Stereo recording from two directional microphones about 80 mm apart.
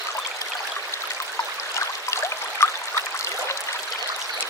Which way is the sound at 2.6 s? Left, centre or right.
Left.